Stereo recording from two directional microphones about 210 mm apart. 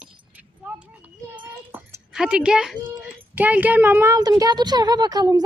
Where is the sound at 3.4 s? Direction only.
10° right (ahead or behind).